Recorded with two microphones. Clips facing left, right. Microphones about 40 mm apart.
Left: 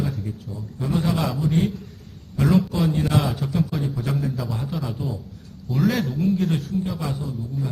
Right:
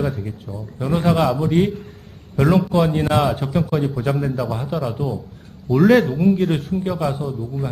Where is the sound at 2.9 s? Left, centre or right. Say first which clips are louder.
Right 5 dB; right.